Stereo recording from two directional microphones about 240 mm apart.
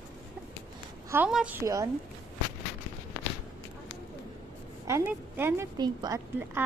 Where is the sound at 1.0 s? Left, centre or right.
Centre.